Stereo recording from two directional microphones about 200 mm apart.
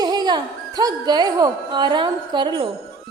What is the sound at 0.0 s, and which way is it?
A woman's voice, 20° right (ahead or behind).